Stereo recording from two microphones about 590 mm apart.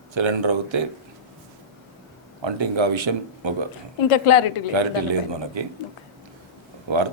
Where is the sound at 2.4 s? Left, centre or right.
Right.